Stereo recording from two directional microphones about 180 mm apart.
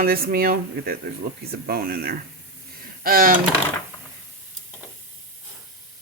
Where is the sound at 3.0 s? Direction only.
55° right (ahead or behind).